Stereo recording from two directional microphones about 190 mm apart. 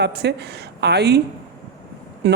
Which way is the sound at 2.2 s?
60° right (ahead or behind).